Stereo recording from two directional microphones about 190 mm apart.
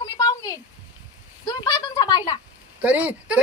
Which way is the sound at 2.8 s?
10° right (ahead or behind).